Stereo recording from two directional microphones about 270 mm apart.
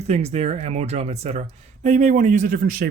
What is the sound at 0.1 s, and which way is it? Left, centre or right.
A man's voice, right.